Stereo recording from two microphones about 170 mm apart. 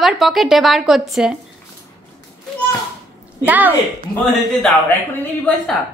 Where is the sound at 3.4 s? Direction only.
10° right (ahead or behind).